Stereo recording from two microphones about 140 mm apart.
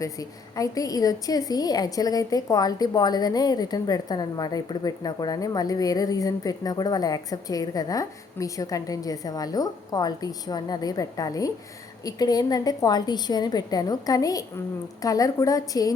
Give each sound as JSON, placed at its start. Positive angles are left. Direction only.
{"t": 0.0, "sound": "a woman's voice", "side_deg": 25}